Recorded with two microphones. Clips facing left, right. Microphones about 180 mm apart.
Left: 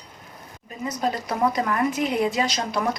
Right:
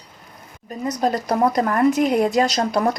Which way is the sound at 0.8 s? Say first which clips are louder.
Right 5 dB; 40° right (ahead or behind).